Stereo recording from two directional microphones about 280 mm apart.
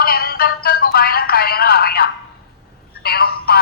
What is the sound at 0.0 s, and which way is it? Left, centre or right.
Music, left.